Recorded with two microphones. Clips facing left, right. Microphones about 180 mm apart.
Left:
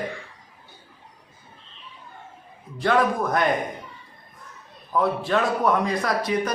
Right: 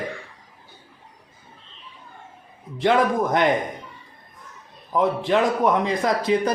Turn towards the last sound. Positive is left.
turn(degrees=-25)  # may be behind; listen again after turning